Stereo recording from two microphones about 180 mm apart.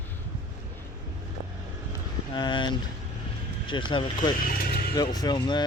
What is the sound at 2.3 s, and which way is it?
Speech, 25° left (ahead or behind).